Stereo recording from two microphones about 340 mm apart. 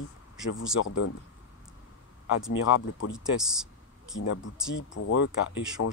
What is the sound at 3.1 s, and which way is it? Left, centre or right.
Speech, centre.